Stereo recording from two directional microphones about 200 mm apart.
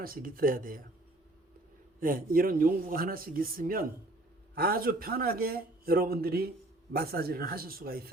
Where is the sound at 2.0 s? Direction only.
45° right (ahead or behind).